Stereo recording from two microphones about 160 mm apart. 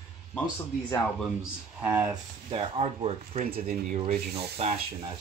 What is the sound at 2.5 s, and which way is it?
Speech, 40° right (ahead or behind).